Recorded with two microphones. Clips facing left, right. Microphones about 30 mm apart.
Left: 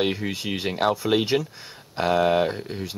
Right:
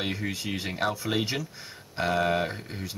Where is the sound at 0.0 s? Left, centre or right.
Left.